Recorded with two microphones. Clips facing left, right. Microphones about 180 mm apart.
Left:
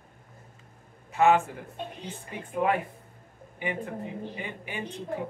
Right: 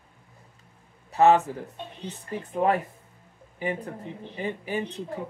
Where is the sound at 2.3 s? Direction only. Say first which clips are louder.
Right 3 dB; 40° right (ahead or behind).